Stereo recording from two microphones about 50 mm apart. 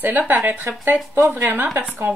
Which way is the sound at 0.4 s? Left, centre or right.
Right.